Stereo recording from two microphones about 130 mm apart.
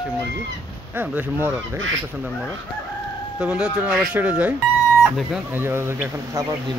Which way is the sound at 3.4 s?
5° right (ahead or behind).